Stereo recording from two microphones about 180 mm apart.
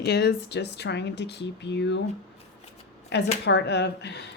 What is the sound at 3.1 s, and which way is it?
Speech, 70° left (ahead or behind).